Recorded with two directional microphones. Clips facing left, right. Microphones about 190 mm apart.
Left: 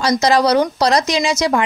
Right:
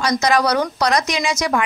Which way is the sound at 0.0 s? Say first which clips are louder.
Left 3 dB; 30° left (ahead or behind).